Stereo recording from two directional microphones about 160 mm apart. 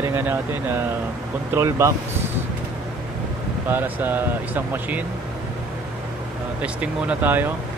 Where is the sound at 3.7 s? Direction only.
10° right (ahead or behind).